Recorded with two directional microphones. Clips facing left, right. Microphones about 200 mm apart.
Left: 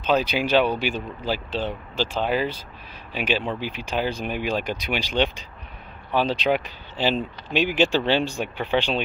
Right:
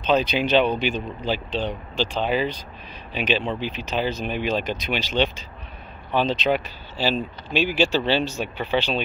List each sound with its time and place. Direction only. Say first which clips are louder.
0.0 s speech: right 1 dB; 10° left (ahead or behind)